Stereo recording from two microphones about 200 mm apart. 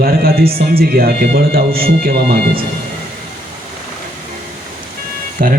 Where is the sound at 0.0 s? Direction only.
50° right (ahead or behind).